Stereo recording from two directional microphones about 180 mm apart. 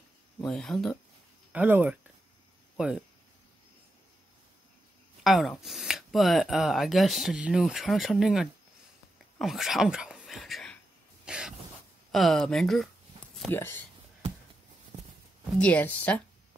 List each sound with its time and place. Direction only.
0.4 s speech: 5° left (ahead or behind)
1.5 s speech: 10° right (ahead or behind)
5.2 s speech: centre (ahead or behind)
11.2 s cough: 5° right (ahead or behind)
12.1 s speech: centre (ahead or behind)
13.5 s speech: 10° left (ahead or behind)
14.9 s a sound: 25° right (ahead or behind)
15.5 s speech: 5° left (ahead or behind)